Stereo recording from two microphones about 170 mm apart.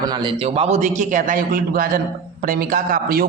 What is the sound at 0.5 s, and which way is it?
A man's voice, 40° right (ahead or behind).